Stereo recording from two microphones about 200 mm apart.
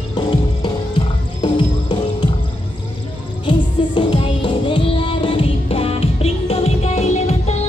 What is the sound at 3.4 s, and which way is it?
Music, 25° left (ahead or behind).